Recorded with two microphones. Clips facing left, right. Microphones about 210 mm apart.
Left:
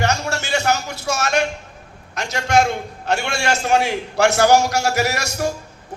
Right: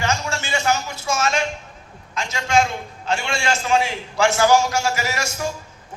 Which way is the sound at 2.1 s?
65° left (ahead or behind).